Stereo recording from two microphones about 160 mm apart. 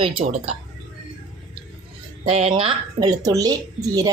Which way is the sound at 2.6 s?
30° right (ahead or behind).